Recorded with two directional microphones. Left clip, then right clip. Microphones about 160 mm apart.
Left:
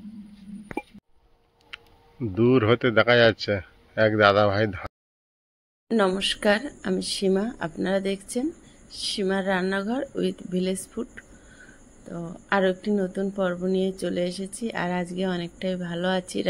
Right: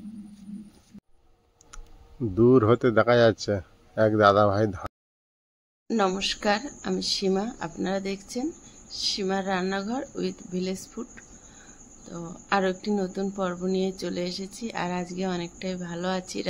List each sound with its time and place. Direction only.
2.3 s speech: 10° right (ahead or behind)
5.9 s speech: 10° left (ahead or behind)